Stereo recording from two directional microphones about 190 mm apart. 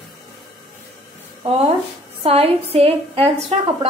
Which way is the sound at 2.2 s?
30° right (ahead or behind).